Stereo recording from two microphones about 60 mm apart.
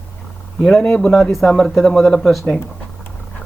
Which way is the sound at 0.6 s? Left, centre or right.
Centre.